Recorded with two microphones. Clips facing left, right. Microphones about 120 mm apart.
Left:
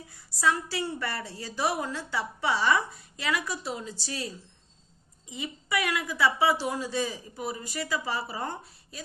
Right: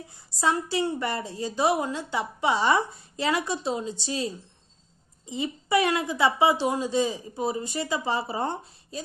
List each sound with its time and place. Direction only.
0.1 s a woman's voice: 25° right (ahead or behind)